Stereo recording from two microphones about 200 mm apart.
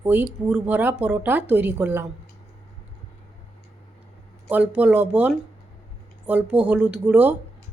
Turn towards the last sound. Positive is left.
turn(degrees=-10)  # may be behind; listen again after turning